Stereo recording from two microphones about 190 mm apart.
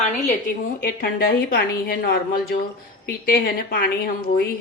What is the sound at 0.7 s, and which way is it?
A woman's voice, 50° left (ahead or behind).